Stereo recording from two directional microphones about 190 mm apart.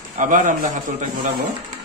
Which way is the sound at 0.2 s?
45° right (ahead or behind).